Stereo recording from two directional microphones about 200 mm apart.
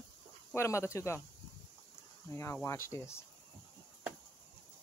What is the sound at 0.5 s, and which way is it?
Speech, 15° left (ahead or behind).